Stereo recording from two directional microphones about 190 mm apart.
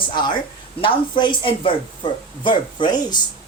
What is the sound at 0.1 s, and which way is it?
A woman's voice, 25° left (ahead or behind).